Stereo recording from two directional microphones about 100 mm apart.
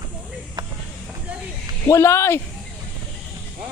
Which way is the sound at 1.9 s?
30° left (ahead or behind).